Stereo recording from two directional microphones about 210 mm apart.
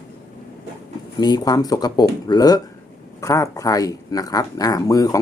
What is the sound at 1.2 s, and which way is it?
Speech, 20° left (ahead or behind).